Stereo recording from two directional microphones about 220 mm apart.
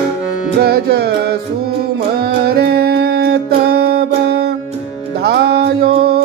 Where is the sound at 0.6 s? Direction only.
45° right (ahead or behind).